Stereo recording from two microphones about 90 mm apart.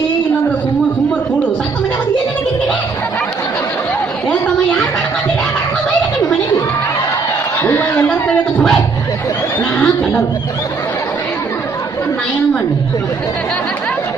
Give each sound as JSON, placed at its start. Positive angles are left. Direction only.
{"t": 4.3, "sound": "chatter", "side_deg": 15}
{"t": 7.6, "sound": "a sound", "side_deg": 20}
{"t": 9.7, "sound": "speech", "side_deg": 20}